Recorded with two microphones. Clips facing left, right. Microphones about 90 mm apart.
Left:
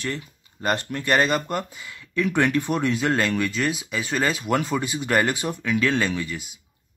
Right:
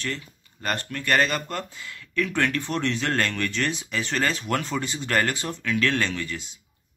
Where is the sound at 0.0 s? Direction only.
20° left (ahead or behind).